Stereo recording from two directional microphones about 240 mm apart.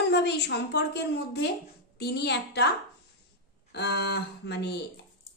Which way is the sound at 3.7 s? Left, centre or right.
Left.